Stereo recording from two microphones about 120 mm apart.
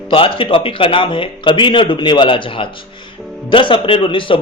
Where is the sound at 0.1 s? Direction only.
50° left (ahead or behind).